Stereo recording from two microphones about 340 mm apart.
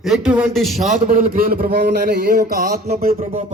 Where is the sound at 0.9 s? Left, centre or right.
Right.